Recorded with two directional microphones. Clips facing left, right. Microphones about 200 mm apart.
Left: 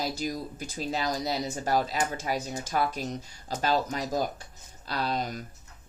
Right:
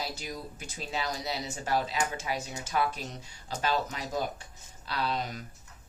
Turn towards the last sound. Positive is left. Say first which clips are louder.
# left 2 dB
turn(degrees=40)  # may be behind; listen again after turning